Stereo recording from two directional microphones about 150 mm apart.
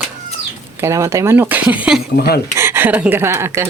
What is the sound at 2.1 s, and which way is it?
Speech, 90° left.